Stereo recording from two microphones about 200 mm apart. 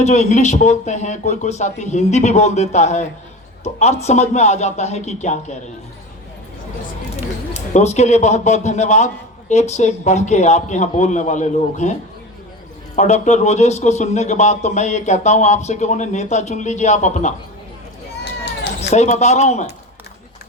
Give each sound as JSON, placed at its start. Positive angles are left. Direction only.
{"t": 0.0, "sound": "a man's voice", "side_deg": 35}
{"t": 7.5, "sound": "a man's voice", "side_deg": 35}
{"t": 13.0, "sound": "a man's voice", "side_deg": 35}
{"t": 18.8, "sound": "a man's voice", "side_deg": 35}